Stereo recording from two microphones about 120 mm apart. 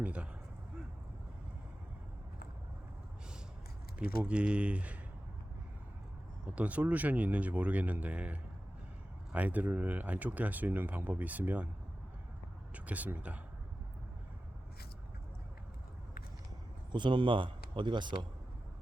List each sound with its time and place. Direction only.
0.0 s a sound: 10° right (ahead or behind)
3.9 s speech: 10° right (ahead or behind)
6.6 s speech: 10° right (ahead or behind)
12.7 s speech: 10° right (ahead or behind)
16.9 s speech: 40° right (ahead or behind)